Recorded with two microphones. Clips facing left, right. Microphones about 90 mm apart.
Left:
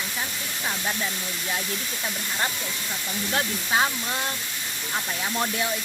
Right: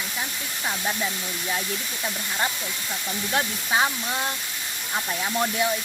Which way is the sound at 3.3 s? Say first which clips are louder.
Right 1 dB; 15° right (ahead or behind).